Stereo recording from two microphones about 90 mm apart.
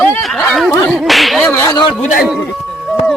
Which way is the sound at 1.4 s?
20° left (ahead or behind).